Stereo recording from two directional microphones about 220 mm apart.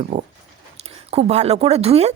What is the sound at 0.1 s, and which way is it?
Speech, 30° right (ahead or behind).